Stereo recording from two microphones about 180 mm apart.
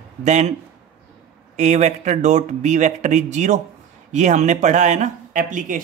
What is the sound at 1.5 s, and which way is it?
Speech, 40° right (ahead or behind).